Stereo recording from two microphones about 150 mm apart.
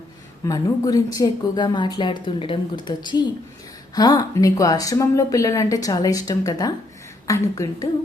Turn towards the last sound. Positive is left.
turn(degrees=25)  # may be behind; listen again after turning